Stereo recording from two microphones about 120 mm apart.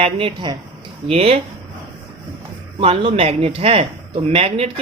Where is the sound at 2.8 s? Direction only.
50° right (ahead or behind).